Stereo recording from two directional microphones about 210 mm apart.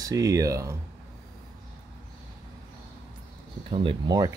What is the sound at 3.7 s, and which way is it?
Speech, 25° right (ahead or behind).